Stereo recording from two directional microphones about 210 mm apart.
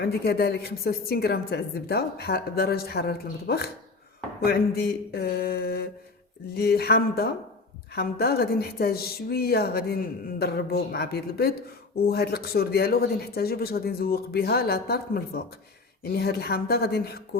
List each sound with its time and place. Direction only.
0.0 s a woman's voice: 50° left (ahead or behind)